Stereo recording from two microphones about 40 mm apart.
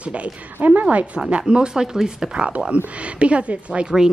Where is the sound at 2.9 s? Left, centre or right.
Right.